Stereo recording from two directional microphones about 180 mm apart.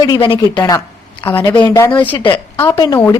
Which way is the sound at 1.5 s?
25° left (ahead or behind).